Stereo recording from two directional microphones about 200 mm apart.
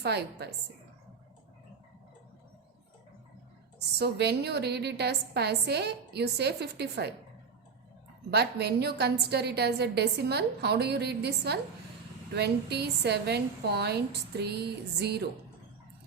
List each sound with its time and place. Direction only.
0.0 s a woman's voice: 55° right (ahead or behind)
3.9 s a woman's voice: 55° right (ahead or behind)
8.3 s a woman's voice: 55° right (ahead or behind)